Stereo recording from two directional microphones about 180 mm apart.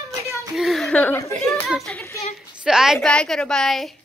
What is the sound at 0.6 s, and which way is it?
Speech, centre (ahead or behind).